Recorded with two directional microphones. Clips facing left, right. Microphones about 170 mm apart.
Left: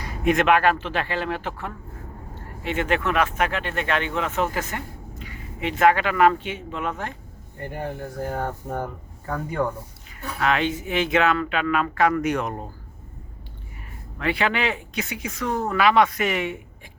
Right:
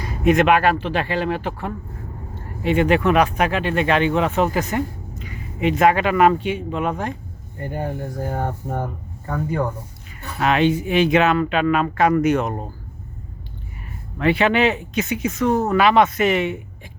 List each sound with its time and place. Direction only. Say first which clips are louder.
0.3 s a man's voice: right 3 dB; 20° right (ahead or behind)
7.7 s speech: right 4 dB; 30° right (ahead or behind)
8.7 s speech: right 2 dB; 5° right (ahead or behind)
10.4 s speech: right 5 dB; 20° right (ahead or behind)
14.2 s speech: right 7 dB; 20° right (ahead or behind)